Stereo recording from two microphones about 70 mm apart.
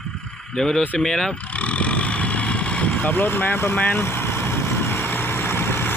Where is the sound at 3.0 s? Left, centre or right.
Left.